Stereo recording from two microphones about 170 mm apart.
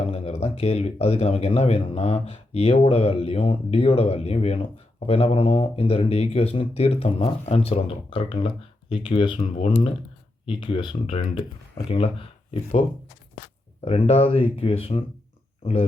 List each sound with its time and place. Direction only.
0.1 s speech: 40° left (ahead or behind)
10.5 s speech: 30° left (ahead or behind)
13.8 s speech: 35° left (ahead or behind)